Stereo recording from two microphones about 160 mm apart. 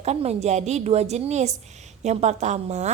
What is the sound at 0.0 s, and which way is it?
A woman's voice, 40° right (ahead or behind).